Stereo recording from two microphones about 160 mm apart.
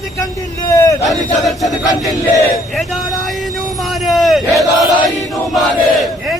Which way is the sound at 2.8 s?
Centre (ahead or behind).